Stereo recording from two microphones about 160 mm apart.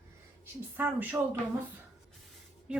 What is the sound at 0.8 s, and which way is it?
Speech, 10° right (ahead or behind).